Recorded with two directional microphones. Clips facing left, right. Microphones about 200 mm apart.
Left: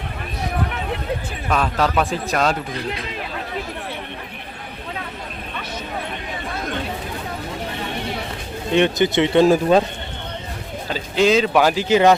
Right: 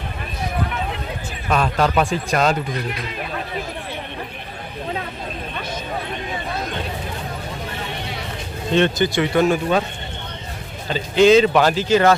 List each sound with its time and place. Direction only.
1.5 s speech: centre (ahead or behind)
8.7 s speech: 15° left (ahead or behind); by 9.8 s 35° left (ahead or behind)
10.8 s speech: 5° left (ahead or behind)